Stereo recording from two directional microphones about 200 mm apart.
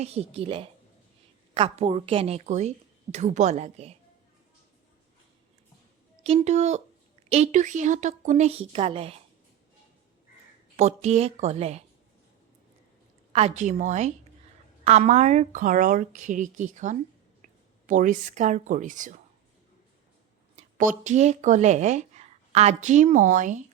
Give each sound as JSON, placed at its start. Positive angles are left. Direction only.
{"t": 0.0, "sound": "a woman's voice", "side_deg": -30}
{"t": 6.2, "sound": "a woman's voice", "side_deg": -30}
{"t": 10.8, "sound": "a woman's voice", "side_deg": -35}
{"t": 13.3, "sound": "a woman's voice", "side_deg": -35}
{"t": 20.6, "sound": "speech", "side_deg": -40}